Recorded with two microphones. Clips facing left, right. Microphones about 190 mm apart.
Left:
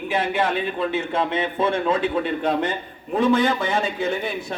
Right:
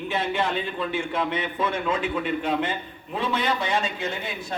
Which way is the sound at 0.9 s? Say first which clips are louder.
Left 3 dB; 25° left (ahead or behind).